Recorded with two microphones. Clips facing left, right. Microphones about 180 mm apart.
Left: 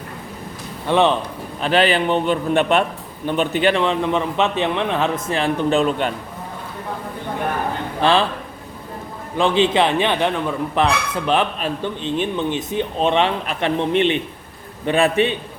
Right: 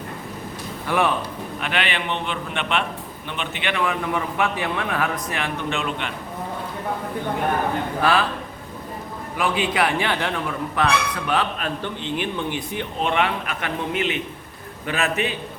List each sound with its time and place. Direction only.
0.9 s a man's voice: 25° left (ahead or behind)
1.6 s a man's voice: 35° left (ahead or behind)
8.0 s a man's voice: 25° left (ahead or behind)
9.3 s a man's voice: 25° left (ahead or behind)